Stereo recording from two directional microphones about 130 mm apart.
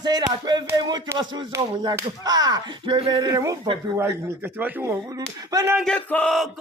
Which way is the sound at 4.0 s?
15° right (ahead or behind).